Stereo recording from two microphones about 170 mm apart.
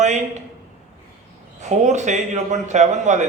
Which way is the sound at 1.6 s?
45° right (ahead or behind).